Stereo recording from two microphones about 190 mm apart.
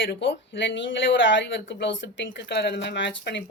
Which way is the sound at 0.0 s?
70° left (ahead or behind).